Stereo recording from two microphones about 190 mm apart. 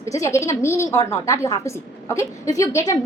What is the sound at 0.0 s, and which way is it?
A woman's voice, 15° left (ahead or behind).